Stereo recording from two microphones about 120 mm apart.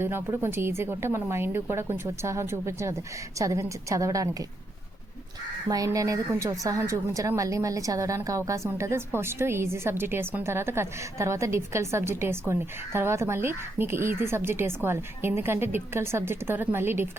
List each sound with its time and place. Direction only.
0.0 s a woman's voice: 20° right (ahead or behind)
5.6 s a woman's voice: 30° right (ahead or behind)